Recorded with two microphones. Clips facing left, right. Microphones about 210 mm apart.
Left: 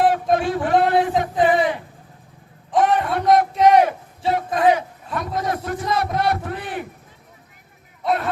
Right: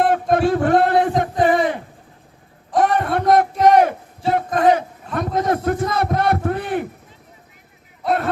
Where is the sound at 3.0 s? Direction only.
50° right (ahead or behind).